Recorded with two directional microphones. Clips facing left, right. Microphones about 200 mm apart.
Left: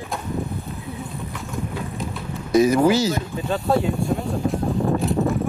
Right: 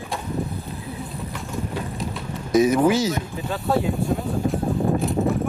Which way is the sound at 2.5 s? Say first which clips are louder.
Left 1 dB; centre (ahead or behind).